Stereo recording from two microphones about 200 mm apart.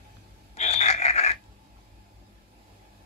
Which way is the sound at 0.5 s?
35° left (ahead or behind).